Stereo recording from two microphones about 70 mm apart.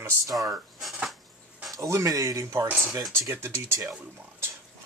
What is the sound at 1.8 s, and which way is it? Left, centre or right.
Speech, right.